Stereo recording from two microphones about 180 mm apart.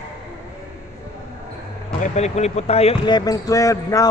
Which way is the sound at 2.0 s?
40° left (ahead or behind).